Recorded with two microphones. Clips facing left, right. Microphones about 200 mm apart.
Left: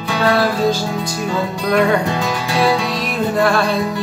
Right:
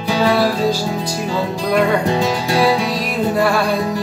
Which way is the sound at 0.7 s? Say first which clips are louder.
Even; 35° right (ahead or behind).